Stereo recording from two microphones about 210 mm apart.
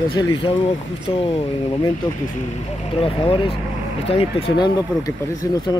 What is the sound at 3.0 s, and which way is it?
Speech, 25° left (ahead or behind).